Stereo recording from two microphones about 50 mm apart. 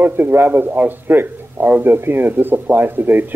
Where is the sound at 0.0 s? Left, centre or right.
Right.